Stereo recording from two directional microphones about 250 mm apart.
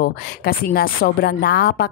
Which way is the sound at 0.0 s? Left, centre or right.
Left.